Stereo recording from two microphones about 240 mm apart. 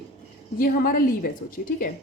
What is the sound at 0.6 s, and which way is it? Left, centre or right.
Speech, left.